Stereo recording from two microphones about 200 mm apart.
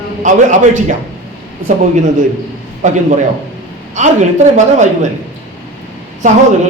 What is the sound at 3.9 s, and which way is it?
Speech, 35° right (ahead or behind).